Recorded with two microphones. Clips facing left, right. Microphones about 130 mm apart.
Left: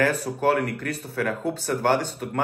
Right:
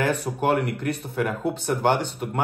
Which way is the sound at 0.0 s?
15° right (ahead or behind).